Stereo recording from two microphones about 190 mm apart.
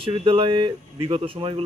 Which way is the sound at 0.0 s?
30° right (ahead or behind).